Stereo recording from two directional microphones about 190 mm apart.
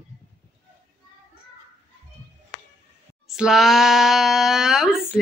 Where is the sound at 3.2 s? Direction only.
5° right (ahead or behind).